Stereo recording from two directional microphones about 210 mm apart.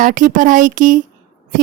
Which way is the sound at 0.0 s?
40° right (ahead or behind).